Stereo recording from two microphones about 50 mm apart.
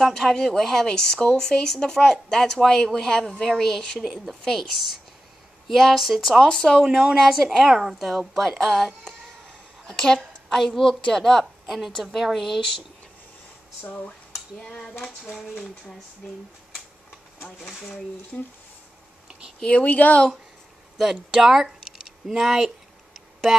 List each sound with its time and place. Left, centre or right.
0.0 s a woman's voice: centre
6.4 s a woman's voice: centre
6.8 s a woman's voice: centre
17.6 s speech: centre
18.3 s a woman's voice: centre
19.6 s speech: left
21.0 s speech: centre